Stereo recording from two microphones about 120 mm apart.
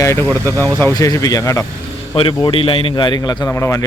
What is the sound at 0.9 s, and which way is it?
Speech, 30° left (ahead or behind).